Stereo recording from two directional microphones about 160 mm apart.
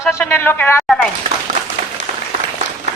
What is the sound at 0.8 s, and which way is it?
Speech, 5° left (ahead or behind).